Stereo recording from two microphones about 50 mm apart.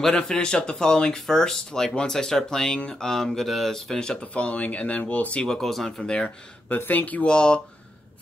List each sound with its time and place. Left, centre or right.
0.0 s speech: centre
4.2 s speech: left
5.5 s speech: centre
6.9 s speech: left
7.2 s speech: centre